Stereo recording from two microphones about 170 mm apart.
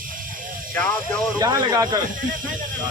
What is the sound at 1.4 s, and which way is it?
Speech, 25° right (ahead or behind).